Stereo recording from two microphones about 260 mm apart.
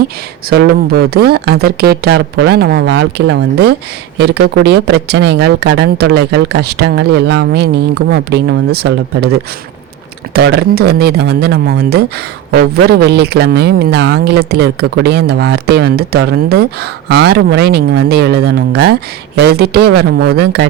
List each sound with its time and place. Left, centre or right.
0.5 s speech: right